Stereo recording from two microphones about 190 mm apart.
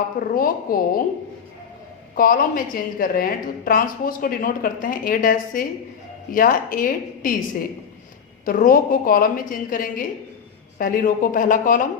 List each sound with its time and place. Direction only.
0.3 s a woman's voice: 50° left (ahead or behind)
2.1 s a woman's voice: 50° left (ahead or behind)
8.4 s a woman's voice: 50° left (ahead or behind)